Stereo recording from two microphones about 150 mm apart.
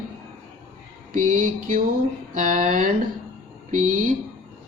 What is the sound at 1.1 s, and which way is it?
A man's voice, 60° right (ahead or behind).